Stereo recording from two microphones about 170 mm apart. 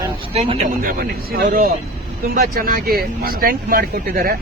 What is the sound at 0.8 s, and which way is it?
Speech, 60° right (ahead or behind).